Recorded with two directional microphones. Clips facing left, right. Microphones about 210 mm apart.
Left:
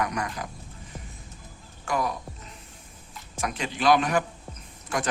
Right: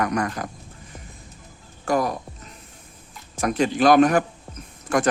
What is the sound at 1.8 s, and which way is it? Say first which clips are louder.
Speech: right 6 dB; 40° right (ahead or behind).